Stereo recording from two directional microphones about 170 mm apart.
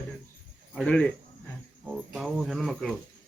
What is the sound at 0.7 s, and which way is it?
Speech, 5° left (ahead or behind).